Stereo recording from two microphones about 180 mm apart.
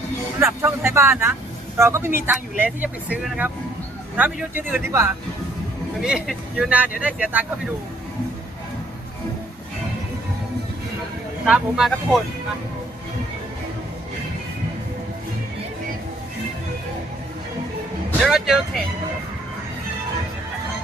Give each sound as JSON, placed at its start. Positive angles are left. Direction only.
{"t": 0.3, "sound": "speech", "side_deg": -15}
{"t": 11.4, "sound": "speech", "side_deg": -5}
{"t": 18.2, "sound": "speech", "side_deg": 0}